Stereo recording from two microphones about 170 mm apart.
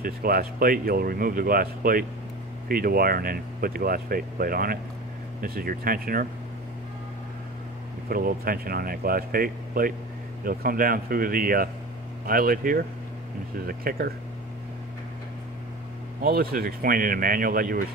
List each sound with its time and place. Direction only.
0.0 s speech: 60° right (ahead or behind)
8.1 s speech: 55° right (ahead or behind)
16.2 s speech: 65° right (ahead or behind)